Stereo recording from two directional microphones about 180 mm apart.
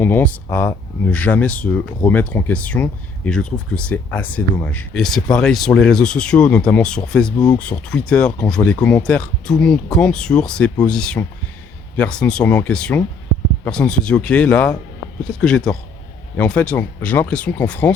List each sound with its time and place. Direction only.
0.0 s speech: 10° left (ahead or behind)
7.3 s speech: 20° left (ahead or behind)
7.6 s speech: 5° left (ahead or behind)